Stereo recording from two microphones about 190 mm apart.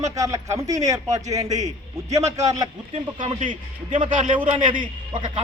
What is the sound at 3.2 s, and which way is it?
A man's voice, 40° right (ahead or behind).